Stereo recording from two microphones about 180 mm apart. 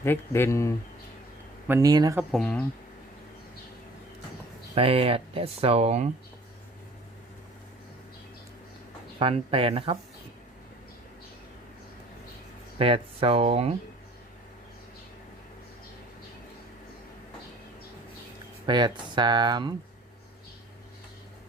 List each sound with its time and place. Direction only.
0.0 s speech: 15° left (ahead or behind)
1.6 s speech: 15° right (ahead or behind)
2.3 s speech: 5° left (ahead or behind)
4.7 s speech: 30° right (ahead or behind)
9.1 s speech: 30° right (ahead or behind)
12.8 s speech: 30° right (ahead or behind)
18.6 s speech: 25° right (ahead or behind)